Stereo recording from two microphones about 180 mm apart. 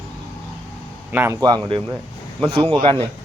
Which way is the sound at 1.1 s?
10° right (ahead or behind).